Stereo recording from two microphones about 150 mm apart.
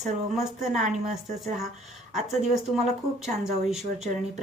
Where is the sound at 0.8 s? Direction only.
50° right (ahead or behind).